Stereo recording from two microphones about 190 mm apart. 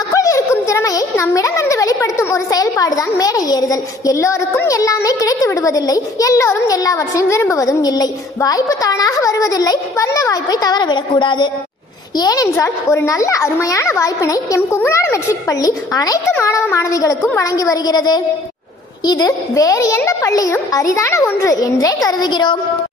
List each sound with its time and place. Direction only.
0.1 s speech: 15° left (ahead or behind)